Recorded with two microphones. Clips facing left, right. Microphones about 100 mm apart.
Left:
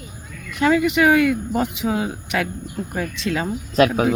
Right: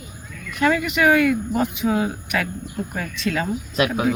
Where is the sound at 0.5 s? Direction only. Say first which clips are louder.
Left 3 dB; 20° left (ahead or behind).